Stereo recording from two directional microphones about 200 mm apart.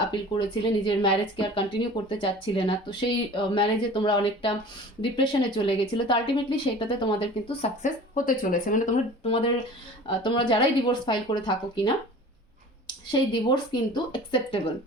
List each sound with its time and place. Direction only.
0.1 s speech: 25° left (ahead or behind); by 9.0 s 45° left (ahead or behind)
9.2 s speech: 30° left (ahead or behind)